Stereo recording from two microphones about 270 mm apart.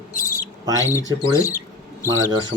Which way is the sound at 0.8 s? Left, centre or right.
Centre.